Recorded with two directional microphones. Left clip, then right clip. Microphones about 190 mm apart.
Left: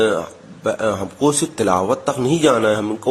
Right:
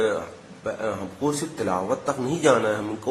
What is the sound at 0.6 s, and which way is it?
Speech, 40° left (ahead or behind).